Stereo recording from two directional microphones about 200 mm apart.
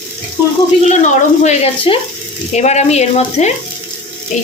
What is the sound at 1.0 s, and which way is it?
Speech, 35° left (ahead or behind).